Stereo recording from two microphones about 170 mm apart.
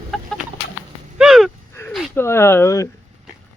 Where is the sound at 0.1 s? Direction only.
5° left (ahead or behind).